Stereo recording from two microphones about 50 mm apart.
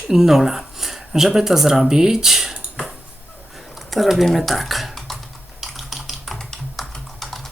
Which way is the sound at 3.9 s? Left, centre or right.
Centre.